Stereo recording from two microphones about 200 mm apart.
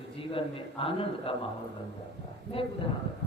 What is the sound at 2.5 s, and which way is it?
Speech, 25° left (ahead or behind).